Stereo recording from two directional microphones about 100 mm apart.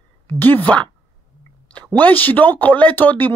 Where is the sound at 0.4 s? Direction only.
20° left (ahead or behind).